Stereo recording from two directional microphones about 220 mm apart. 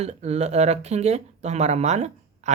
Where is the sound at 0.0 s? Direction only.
30° right (ahead or behind).